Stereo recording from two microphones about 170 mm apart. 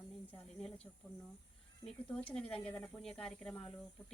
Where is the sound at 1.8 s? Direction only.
5° left (ahead or behind).